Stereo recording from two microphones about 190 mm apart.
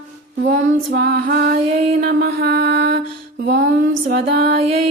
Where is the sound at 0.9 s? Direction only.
55° right (ahead or behind).